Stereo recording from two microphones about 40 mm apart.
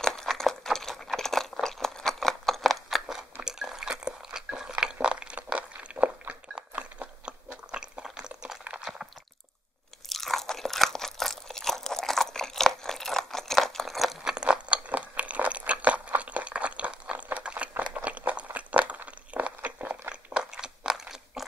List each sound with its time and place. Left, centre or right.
0.0 s a sound: centre
0.3 s crunch: centre
3.4 s drip: centre
4.6 s a sound: centre
5.6 s crunch: right
6.5 s chewing: right
8.8 s a sound: centre
10.0 s crunch: centre
14.2 s crunch: right
14.9 s crunch: right
20.5 s crunch: centre